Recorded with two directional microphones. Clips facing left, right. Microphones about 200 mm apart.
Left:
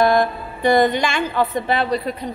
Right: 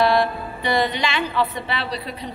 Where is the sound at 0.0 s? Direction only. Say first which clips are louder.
Left 2 dB; 45° left (ahead or behind).